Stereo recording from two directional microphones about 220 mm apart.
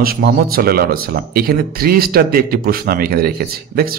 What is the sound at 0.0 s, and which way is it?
Speech, 45° right (ahead or behind).